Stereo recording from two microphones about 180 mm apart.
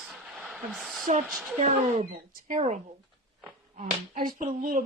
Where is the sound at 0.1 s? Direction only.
5° right (ahead or behind).